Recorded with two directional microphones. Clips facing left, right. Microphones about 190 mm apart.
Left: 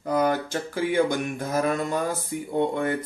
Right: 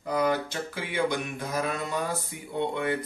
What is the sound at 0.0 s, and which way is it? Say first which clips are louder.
Mantra: left 3 dB; 45° left (ahead or behind).